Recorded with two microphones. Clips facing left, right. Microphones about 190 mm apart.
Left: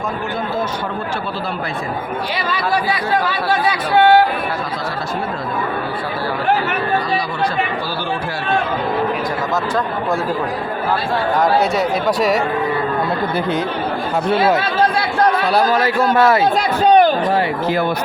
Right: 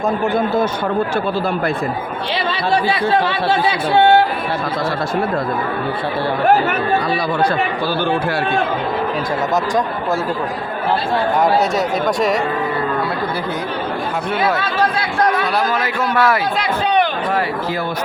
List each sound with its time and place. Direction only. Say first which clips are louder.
3.2 s speech: right 1 dB; 25° right (ahead or behind)
12.0 s speech: left 1 dB; centre (ahead or behind)
14.3 s a man's voice: left 4 dB; 30° left (ahead or behind)
16.6 s a sound: left 5 dB; 40° left (ahead or behind)